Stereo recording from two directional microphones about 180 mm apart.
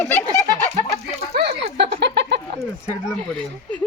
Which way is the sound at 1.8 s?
75° right (ahead or behind).